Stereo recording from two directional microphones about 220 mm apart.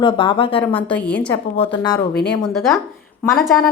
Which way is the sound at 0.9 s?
5° left (ahead or behind).